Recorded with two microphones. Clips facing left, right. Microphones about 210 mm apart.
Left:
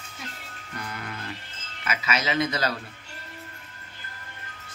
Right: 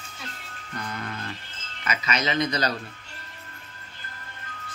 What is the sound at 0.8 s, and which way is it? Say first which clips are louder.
Music: right 2 dB; 10° left (ahead or behind).